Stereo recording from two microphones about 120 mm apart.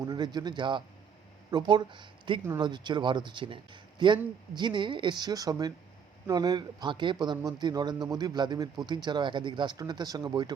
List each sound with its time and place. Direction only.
0.0 s speech: 35° right (ahead or behind)